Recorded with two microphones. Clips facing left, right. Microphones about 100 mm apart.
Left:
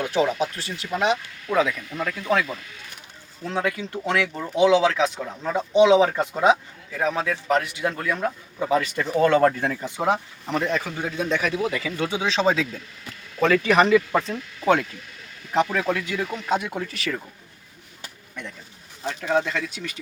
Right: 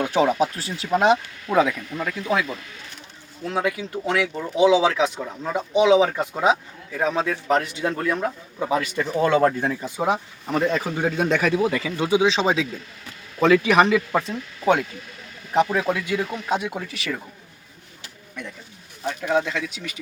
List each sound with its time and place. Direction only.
0.0 s speech: 25° right (ahead or behind)
2.0 s speech: 10° right (ahead or behind)
8.0 s speech: 10° right (ahead or behind)
10.7 s a man's voice: 35° right (ahead or behind)
11.0 s a man's voice: 50° right (ahead or behind)
11.5 s speech: 30° right (ahead or behind)
11.9 s speech: 15° right (ahead or behind)
19.0 s speech: 5° right (ahead or behind)